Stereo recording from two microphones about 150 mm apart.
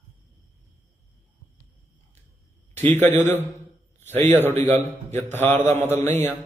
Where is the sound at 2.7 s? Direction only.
15° left (ahead or behind).